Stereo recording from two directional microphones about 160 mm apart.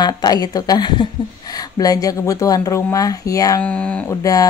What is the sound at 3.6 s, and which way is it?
Speech, 10° left (ahead or behind).